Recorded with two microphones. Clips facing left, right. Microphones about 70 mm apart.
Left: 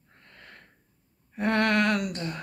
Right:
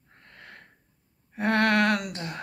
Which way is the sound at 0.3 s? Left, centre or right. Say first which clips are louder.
Right 2 dB; right.